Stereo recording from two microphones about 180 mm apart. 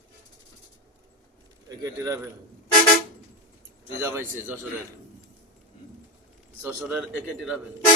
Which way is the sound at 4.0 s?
15° right (ahead or behind).